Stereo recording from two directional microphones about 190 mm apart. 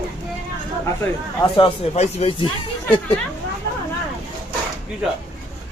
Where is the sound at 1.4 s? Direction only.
25° left (ahead or behind).